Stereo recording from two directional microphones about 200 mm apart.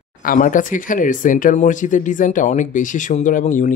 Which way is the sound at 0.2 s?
40° left (ahead or behind).